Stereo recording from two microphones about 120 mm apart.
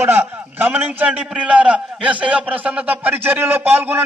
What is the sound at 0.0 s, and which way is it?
A man's voice, 20° right (ahead or behind).